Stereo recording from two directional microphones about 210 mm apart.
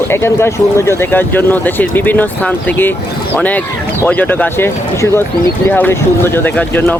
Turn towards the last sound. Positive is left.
turn(degrees=10)  # may be behind; listen again after turning